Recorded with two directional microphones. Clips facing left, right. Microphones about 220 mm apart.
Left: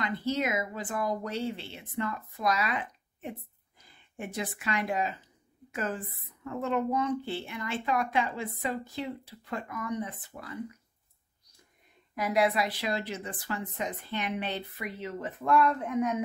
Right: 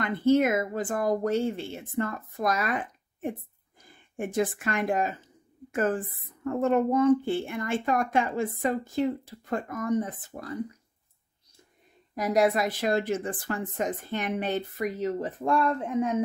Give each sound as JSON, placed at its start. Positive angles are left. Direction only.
{"t": 0.0, "sound": "speech", "side_deg": -50}
{"t": 12.2, "sound": "speech", "side_deg": -40}